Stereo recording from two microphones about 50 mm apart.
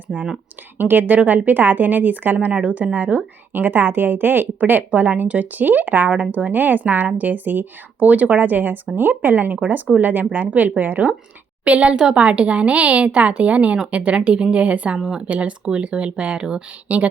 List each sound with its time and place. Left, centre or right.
0.1 s a woman's voice: right
0.8 s a woman's voice: right
14.9 s speech: centre
15.2 s a woman's voice: right